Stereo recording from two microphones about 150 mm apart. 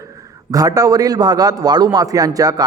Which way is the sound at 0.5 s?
25° right (ahead or behind).